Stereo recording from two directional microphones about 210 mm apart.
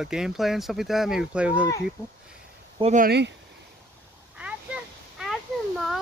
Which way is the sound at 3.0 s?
55° right (ahead or behind).